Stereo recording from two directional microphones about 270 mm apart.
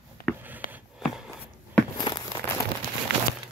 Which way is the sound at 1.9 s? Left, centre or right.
Centre.